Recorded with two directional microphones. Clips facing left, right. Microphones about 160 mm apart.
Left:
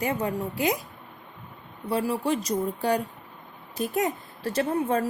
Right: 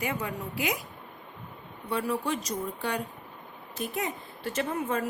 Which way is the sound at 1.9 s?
35° left (ahead or behind).